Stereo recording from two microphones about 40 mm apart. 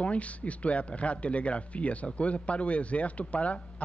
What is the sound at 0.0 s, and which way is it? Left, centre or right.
Speech, left.